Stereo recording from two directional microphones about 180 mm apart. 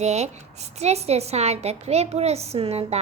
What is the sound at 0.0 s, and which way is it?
A child's voice, 40° right (ahead or behind).